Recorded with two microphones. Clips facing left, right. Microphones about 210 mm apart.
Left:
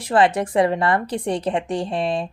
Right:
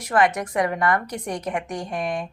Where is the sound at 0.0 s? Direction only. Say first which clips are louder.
Left 3 dB; 30° left (ahead or behind).